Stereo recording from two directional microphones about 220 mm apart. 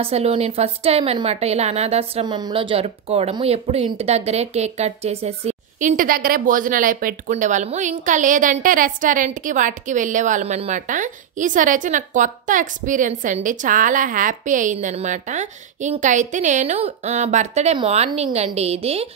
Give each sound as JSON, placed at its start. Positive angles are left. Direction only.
{"t": 0.0, "sound": "a woman's voice", "side_deg": -25}